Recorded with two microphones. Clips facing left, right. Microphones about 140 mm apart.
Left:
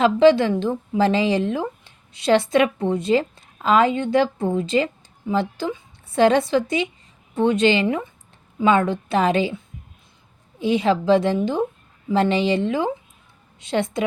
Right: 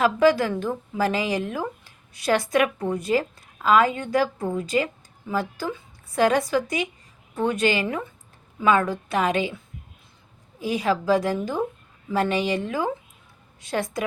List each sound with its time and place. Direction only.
0.0 s a woman's voice: 25° left (ahead or behind)